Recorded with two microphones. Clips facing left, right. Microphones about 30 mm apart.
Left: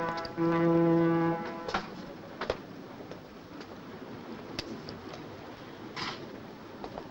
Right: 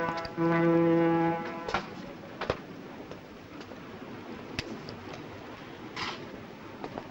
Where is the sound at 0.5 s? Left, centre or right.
Centre.